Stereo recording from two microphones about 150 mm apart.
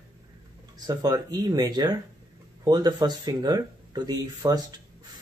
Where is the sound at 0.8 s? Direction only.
25° right (ahead or behind).